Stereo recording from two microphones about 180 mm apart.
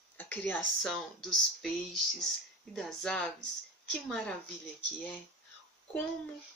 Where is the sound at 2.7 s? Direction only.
5° left (ahead or behind).